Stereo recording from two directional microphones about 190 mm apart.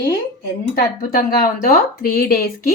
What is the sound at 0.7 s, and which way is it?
Speech, 50° left (ahead or behind).